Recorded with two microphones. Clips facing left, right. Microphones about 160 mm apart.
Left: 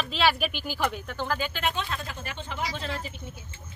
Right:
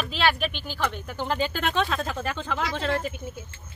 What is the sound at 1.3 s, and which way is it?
Speech, 30° right (ahead or behind).